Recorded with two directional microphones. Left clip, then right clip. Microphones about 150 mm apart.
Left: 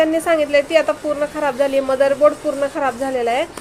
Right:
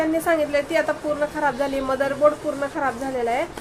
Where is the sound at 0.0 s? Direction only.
15° left (ahead or behind).